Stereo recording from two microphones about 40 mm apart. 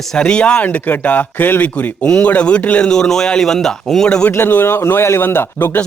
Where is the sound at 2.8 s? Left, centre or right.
Centre.